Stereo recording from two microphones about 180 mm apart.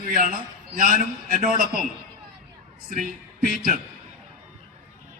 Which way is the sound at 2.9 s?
50° right (ahead or behind).